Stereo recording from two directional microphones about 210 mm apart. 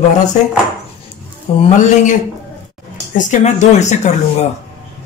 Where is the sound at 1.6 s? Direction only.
35° left (ahead or behind).